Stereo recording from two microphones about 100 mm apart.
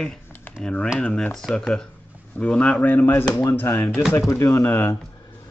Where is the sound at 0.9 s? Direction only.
10° left (ahead or behind).